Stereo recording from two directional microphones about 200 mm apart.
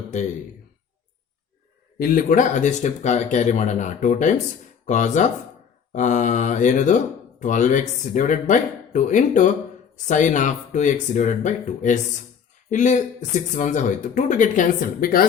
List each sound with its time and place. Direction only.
2.0 s speech: 45° left (ahead or behind)